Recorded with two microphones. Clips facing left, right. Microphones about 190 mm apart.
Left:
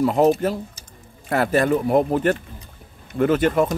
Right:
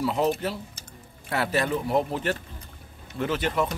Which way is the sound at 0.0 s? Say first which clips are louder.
Left 8 dB; 50° left (ahead or behind).